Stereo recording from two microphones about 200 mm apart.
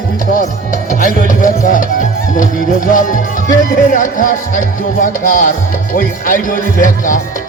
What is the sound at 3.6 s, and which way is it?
Music, 40° left (ahead or behind).